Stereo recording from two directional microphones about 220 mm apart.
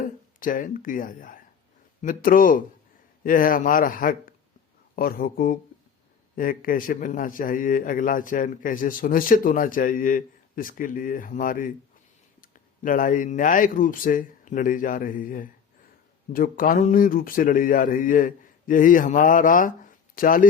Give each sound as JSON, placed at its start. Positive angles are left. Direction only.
{"t": 0.3, "sound": "a man's voice", "side_deg": 40}